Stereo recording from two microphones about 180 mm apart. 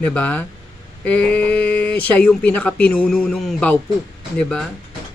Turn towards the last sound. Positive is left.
turn(degrees=5)  # may be behind; listen again after turning